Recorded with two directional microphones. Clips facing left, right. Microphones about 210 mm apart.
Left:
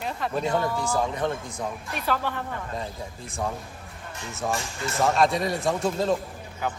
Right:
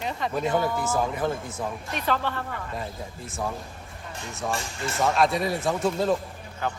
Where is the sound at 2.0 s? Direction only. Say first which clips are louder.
Even; 10° left (ahead or behind).